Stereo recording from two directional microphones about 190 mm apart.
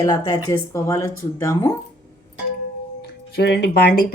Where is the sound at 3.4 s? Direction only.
60° left (ahead or behind).